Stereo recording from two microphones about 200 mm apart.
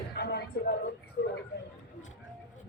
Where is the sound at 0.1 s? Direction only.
55° left (ahead or behind).